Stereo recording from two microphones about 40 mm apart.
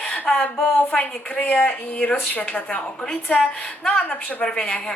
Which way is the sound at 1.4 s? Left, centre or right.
Left.